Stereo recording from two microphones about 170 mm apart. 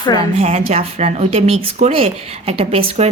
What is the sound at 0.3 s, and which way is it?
Speech, 40° right (ahead or behind).